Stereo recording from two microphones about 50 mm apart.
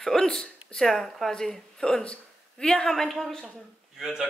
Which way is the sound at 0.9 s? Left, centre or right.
Centre.